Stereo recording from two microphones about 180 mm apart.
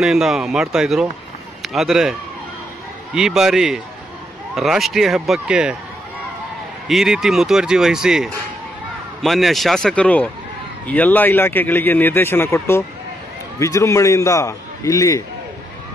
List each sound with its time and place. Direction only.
0.0 s speech: centre (ahead or behind)
3.2 s speech: centre (ahead or behind)
6.9 s speech: centre (ahead or behind); by 15.2 s 15° left (ahead or behind)